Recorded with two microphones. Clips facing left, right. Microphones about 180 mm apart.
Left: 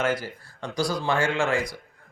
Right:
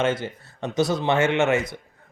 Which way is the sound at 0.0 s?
25° right (ahead or behind).